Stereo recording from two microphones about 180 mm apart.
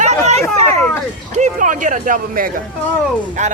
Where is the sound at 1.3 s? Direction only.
45° right (ahead or behind).